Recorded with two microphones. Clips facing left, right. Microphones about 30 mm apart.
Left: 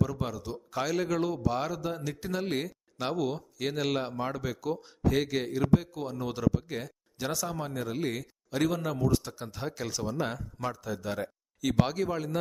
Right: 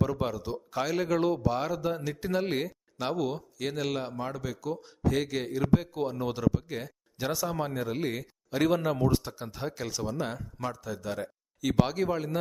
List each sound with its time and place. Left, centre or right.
0.0 s speech: right
1.5 s a man's voice: centre
5.9 s speech: centre
9.2 s a man's voice: centre